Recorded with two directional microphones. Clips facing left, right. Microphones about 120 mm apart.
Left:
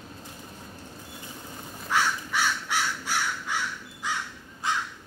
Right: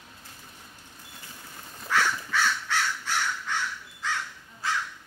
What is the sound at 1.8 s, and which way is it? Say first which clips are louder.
Crow: even; 15° left (ahead or behind).